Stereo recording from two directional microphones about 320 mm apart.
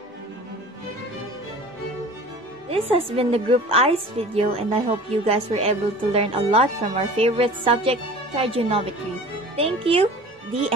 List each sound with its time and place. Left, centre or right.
2.7 s a woman's voice: centre